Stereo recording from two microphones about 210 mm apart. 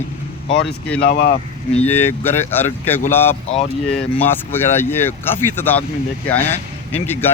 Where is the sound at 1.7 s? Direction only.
10° left (ahead or behind).